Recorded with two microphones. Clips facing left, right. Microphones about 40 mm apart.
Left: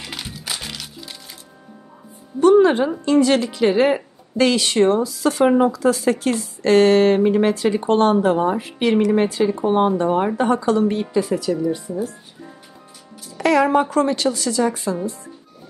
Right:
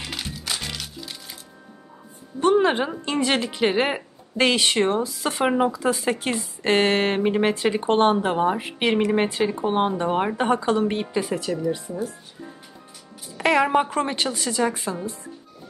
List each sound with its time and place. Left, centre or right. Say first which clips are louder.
0.0 s music: even; centre
2.4 s music: left 6 dB; right
3.1 s a woman's voice: left 8 dB; right
13.4 s a woman's voice: left 3 dB; right